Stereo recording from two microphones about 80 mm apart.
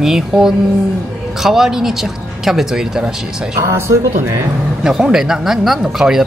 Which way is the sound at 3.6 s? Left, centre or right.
Right.